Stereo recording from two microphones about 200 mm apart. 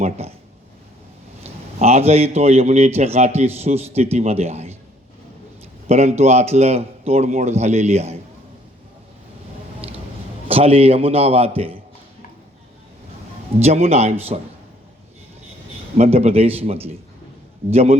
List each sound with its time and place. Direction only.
0.0 s speech: 30° right (ahead or behind)
1.5 s a man's voice: 30° right (ahead or behind)
5.9 s a man's voice: 35° right (ahead or behind)
10.5 s a man's voice: 30° right (ahead or behind)
13.6 s a man's voice: 30° right (ahead or behind)
16.0 s a man's voice: 30° right (ahead or behind)